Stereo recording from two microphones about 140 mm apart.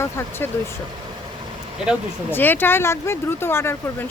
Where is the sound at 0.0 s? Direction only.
20° left (ahead or behind).